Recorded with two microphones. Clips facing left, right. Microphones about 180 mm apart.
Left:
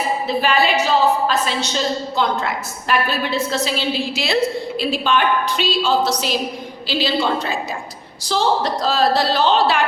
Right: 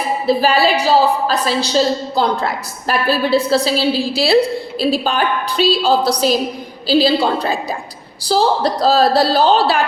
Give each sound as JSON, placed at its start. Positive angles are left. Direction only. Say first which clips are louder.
{"t": 0.3, "sound": "a woman's voice", "louder": "right 5 dB", "side_deg": -35}